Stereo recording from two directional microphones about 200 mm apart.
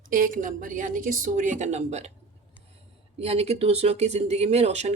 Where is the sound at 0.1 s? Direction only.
40° right (ahead or behind).